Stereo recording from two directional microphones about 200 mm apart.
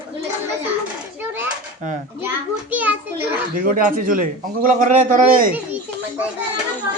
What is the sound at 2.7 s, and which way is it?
Speech, 10° right (ahead or behind).